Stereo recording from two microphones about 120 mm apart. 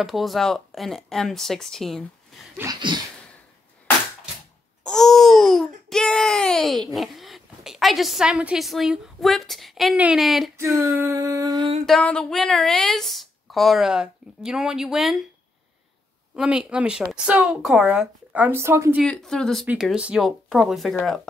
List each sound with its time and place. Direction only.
0.0 s speech: centre (ahead or behind)
2.7 s a sound: 40° right (ahead or behind)
4.8 s speech: 5° left (ahead or behind)
10.6 s female singing: 20° right (ahead or behind)
11.0 s a sound: 25° right (ahead or behind)
11.8 s speech: 5° left (ahead or behind)
16.3 s speech: 5° right (ahead or behind)
19.0 s speech: 5° left (ahead or behind)
19.8 s speech: 5° right (ahead or behind)